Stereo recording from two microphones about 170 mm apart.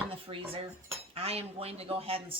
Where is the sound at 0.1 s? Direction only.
35° right (ahead or behind).